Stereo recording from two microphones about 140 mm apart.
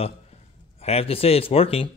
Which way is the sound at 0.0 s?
45° left (ahead or behind).